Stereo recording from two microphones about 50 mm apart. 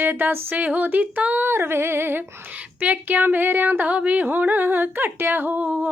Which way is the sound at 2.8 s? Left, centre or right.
Right.